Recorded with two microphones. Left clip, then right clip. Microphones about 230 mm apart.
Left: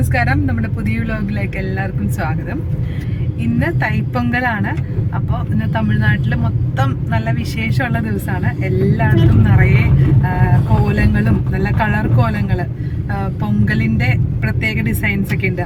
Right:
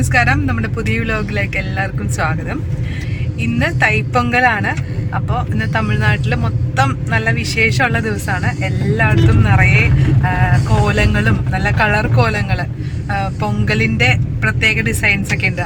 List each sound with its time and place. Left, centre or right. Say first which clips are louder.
0.1 s speech: right 4 dB; centre
3.6 s speech: right 6 dB; centre